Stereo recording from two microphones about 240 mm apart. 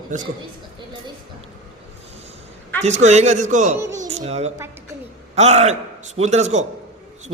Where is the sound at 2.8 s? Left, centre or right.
Right.